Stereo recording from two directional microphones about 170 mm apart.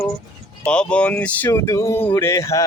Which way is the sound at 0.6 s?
5° left (ahead or behind).